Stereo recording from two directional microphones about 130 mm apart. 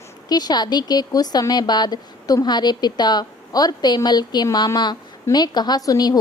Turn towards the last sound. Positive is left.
turn(degrees=30)  # may be behind; listen again after turning